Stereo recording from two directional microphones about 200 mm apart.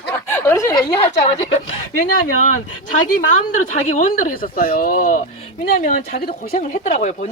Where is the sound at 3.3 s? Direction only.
40° left (ahead or behind).